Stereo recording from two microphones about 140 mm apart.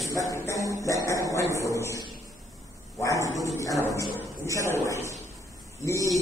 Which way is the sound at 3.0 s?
20° left (ahead or behind).